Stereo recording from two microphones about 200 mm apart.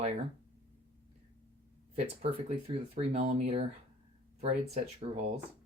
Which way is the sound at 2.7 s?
30° right (ahead or behind).